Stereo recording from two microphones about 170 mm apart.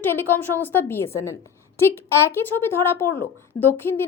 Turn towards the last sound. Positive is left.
turn(degrees=15)  # may be behind; listen again after turning